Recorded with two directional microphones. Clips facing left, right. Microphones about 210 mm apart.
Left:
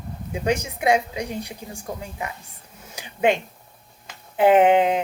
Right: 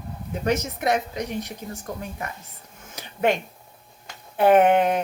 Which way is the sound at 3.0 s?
15° left (ahead or behind).